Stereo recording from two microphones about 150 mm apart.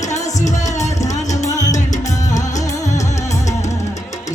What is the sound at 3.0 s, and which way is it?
Music, 20° left (ahead or behind).